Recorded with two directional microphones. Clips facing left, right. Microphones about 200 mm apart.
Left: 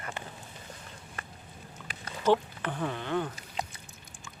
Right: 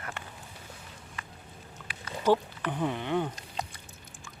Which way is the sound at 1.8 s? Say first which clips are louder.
Left 2 dB; 45° left (ahead or behind).